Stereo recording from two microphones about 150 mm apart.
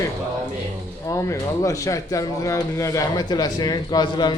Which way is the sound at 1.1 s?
20° left (ahead or behind).